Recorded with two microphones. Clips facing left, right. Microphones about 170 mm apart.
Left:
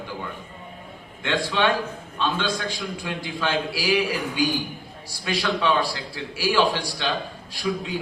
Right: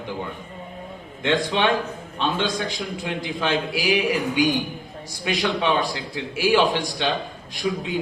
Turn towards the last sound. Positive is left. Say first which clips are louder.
# right 1 dB
turn(degrees=-20)  # may be behind; listen again after turning